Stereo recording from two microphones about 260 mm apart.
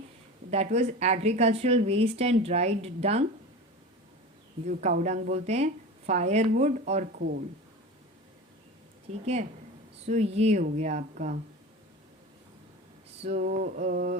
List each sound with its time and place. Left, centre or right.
0.5 s speech: right
4.6 s speech: right
9.2 s speech: right
13.2 s speech: right